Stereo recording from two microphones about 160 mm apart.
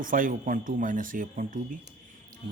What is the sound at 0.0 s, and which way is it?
A man's voice, 60° right (ahead or behind).